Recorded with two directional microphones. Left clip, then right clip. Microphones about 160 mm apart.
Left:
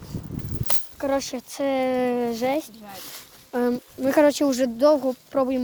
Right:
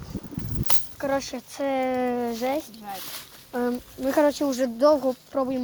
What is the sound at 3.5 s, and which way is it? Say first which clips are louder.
Speech: left 3 dB; 80° left.